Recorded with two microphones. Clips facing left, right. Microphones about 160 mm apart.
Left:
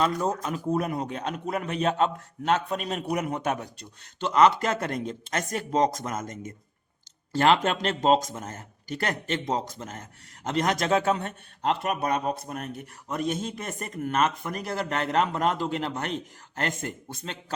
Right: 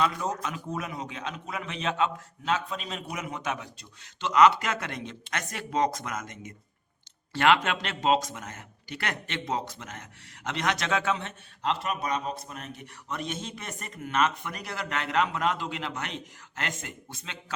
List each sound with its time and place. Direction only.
0.0 s a man's voice: 45° left (ahead or behind)
0.9 s a man's voice: 55° left (ahead or behind)